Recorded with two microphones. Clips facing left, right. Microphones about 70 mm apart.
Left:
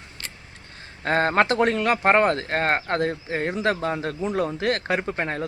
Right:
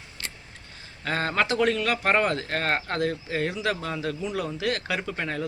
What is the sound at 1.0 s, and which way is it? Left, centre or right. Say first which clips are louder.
Speech: left 6 dB; left.